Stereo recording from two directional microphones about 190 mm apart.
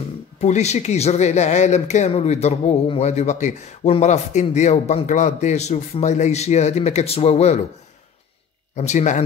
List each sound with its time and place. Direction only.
0.4 s speech: 35° left (ahead or behind)
8.7 s speech: 35° left (ahead or behind)